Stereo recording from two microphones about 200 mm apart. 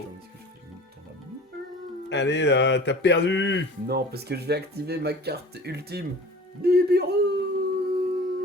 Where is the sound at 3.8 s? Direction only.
50° right (ahead or behind).